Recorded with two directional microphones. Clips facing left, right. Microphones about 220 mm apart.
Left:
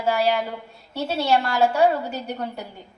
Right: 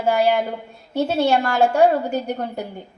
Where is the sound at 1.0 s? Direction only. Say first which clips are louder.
Right 3 dB; 50° right (ahead or behind).